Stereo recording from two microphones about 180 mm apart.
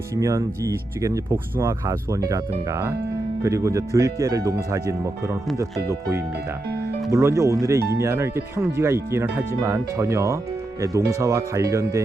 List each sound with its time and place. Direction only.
0.1 s speech: 15° right (ahead or behind)